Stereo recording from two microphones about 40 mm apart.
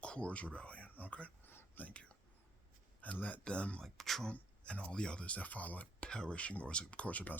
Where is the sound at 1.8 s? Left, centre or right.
Left.